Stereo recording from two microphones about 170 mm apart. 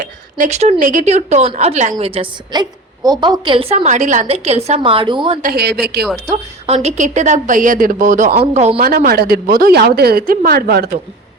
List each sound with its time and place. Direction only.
0.0 s a woman's voice: 45° right (ahead or behind); by 5.4 s 30° right (ahead or behind)
5.4 s speech: 65° right (ahead or behind)
6.3 s a woman's voice: 40° right (ahead or behind)
8.8 s a woman's voice: 60° right (ahead or behind)